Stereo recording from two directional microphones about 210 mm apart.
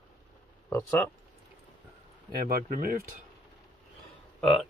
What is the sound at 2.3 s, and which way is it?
Speech, 45° right (ahead or behind).